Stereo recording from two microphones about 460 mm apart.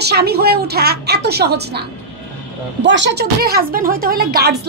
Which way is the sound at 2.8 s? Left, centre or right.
Right.